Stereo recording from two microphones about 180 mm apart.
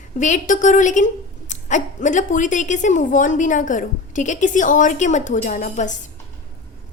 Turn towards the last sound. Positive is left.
turn(degrees=45)  # may be behind; listen again after turning